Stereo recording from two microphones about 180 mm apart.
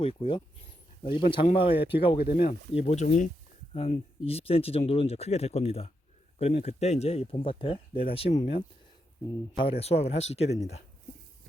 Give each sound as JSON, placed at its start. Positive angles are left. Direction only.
{"t": 0.0, "sound": "speech", "side_deg": 30}
{"t": 2.1, "sound": "speech", "side_deg": 55}
{"t": 2.7, "sound": "speech", "side_deg": 40}
{"t": 4.3, "sound": "speech", "side_deg": 30}